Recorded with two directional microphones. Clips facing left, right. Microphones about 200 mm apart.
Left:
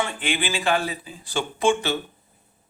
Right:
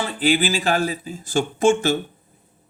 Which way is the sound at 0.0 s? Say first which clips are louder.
Right 6 dB; 35° right (ahead or behind).